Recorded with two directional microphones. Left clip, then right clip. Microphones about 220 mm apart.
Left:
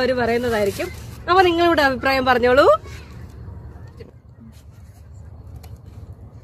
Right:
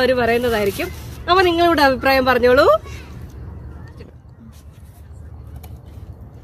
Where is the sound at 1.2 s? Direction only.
30° left (ahead or behind).